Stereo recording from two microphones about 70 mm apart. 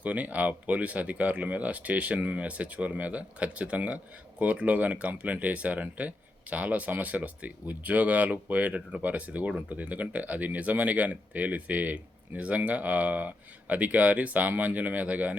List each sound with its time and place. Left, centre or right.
0.0 s speech: centre